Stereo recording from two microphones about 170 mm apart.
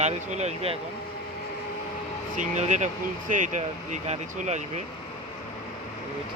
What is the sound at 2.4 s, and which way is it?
Speech, 45° right (ahead or behind).